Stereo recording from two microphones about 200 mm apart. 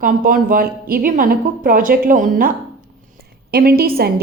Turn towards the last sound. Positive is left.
turn(degrees=-50)  # may be behind; listen again after turning